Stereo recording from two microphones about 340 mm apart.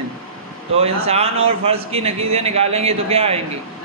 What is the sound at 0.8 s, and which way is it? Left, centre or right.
A man's voice, centre.